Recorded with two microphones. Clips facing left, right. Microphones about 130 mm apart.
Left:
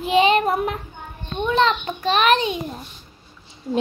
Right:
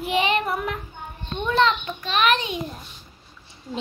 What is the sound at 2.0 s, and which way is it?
Speech, 35° left (ahead or behind).